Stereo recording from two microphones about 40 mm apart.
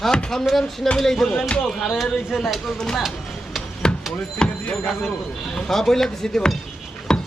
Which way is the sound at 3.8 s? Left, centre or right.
Centre.